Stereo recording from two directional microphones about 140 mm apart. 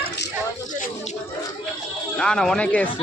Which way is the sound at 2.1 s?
5° left (ahead or behind).